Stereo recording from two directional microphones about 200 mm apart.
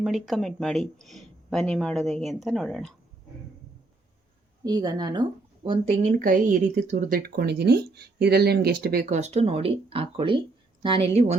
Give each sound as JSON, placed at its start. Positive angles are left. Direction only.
{"t": 0.0, "sound": "speech", "side_deg": 0}
{"t": 4.6, "sound": "a woman's voice", "side_deg": -20}